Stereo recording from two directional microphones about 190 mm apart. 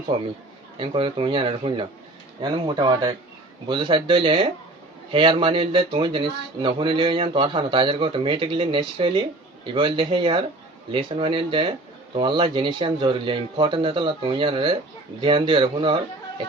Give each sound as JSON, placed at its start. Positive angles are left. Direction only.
{"t": 0.1, "sound": "speech", "side_deg": -25}